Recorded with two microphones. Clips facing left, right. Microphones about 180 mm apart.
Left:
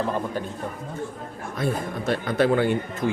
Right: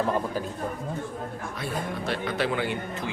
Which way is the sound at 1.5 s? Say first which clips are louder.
Left 6 dB; 45° left (ahead or behind).